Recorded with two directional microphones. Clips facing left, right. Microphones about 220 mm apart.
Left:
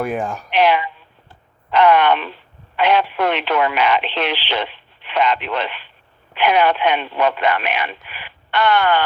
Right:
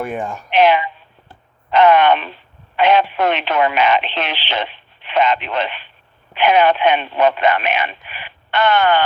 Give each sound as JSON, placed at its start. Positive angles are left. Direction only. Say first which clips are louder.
{"t": 0.0, "sound": "speech", "louder": "left 2 dB", "side_deg": 0}
{"t": 0.5, "sound": "a sound", "louder": "right 3 dB", "side_deg": -20}
{"t": 2.7, "sound": "speech", "louder": "right 2 dB", "side_deg": -20}